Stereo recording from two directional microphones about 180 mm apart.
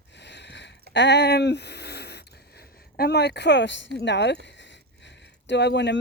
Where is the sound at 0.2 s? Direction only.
75° left (ahead or behind).